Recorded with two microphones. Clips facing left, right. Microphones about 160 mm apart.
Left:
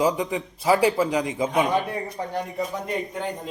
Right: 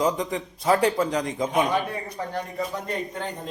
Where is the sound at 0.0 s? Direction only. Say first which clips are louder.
Left 2 dB; 5° left (ahead or behind).